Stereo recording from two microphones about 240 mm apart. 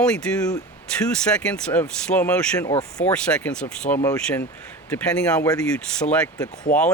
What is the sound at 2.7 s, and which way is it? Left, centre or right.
Speech, left.